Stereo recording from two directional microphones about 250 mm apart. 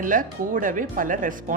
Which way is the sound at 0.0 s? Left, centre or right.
Right.